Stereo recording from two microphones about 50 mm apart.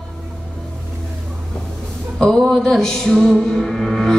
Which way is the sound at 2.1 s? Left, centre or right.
Centre.